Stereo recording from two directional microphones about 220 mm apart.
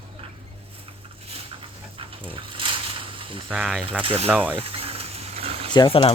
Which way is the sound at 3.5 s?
5° right (ahead or behind).